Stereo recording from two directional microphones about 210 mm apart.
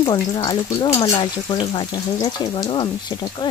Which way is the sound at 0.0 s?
20° left (ahead or behind).